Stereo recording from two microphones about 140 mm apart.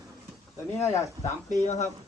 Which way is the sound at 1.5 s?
60° left (ahead or behind).